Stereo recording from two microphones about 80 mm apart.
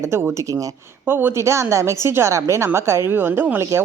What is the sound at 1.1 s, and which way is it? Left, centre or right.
A woman's voice, right.